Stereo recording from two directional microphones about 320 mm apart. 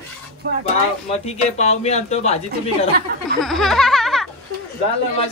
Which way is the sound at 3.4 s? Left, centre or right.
Centre.